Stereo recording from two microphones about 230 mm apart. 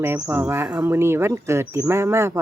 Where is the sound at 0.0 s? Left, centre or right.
Centre.